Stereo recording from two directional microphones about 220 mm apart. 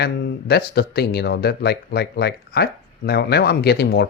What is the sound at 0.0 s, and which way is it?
Speech, 50° left (ahead or behind).